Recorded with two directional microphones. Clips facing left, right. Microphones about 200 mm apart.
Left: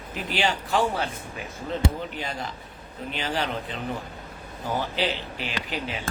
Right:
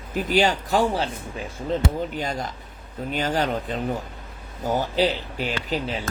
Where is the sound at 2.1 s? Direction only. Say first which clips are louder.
Right 4 dB; 45° right (ahead or behind).